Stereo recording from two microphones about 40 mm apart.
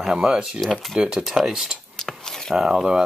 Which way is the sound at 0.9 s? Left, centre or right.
Centre.